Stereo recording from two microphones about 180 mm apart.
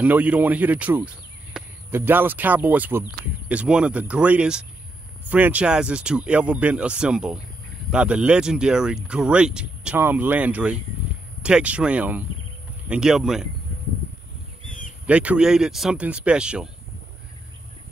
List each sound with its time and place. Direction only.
0.0 s speech: 10° right (ahead or behind)
14.7 s a sound: 45° left (ahead or behind)
15.0 s speech: 5° right (ahead or behind)